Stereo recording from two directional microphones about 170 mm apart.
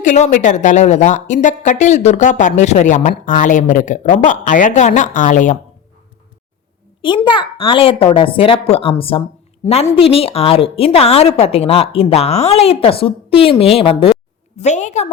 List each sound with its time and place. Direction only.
0.0 s a woman's voice: 45° left (ahead or behind)
7.3 s a woman's voice: 30° left (ahead or behind)
14.6 s a woman's voice: 45° left (ahead or behind)